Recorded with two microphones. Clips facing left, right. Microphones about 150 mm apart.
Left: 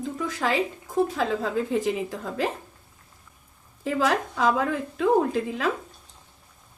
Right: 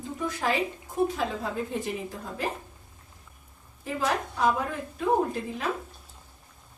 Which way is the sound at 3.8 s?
90° left.